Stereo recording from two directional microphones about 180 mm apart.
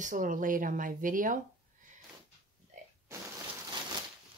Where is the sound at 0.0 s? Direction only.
45° right (ahead or behind).